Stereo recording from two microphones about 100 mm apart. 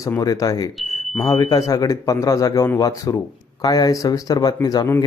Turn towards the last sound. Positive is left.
turn(degrees=40)  # may be behind; listen again after turning